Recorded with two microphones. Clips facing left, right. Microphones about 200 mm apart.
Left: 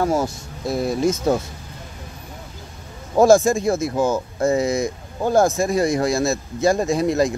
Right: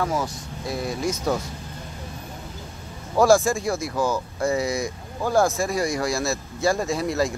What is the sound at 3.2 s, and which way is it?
Speech, 20° left (ahead or behind).